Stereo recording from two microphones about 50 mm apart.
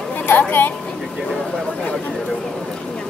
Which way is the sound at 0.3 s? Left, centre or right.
Left.